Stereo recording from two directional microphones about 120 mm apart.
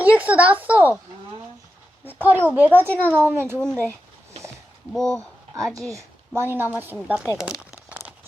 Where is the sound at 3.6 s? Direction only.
10° left (ahead or behind).